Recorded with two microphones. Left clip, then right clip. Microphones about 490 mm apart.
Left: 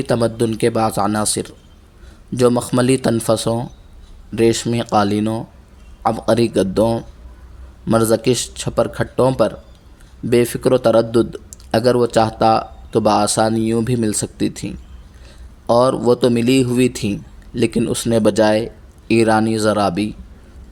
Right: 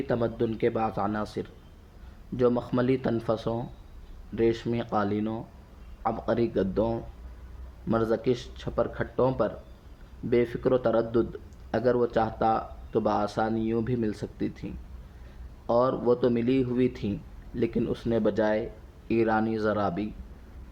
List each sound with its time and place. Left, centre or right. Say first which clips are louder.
0.1 s speech: left 11 dB; right